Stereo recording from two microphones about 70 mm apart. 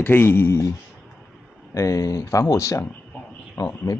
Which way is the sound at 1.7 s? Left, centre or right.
Left.